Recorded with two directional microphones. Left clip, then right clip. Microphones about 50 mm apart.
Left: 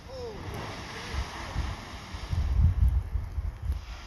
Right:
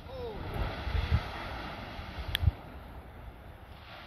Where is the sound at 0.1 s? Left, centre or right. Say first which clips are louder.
Left 1 dB; centre.